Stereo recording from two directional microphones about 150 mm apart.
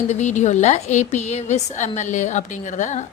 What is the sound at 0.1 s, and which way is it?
A woman's voice, 50° left (ahead or behind).